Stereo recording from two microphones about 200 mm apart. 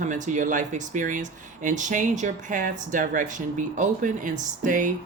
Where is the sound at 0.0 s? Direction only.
40° right (ahead or behind).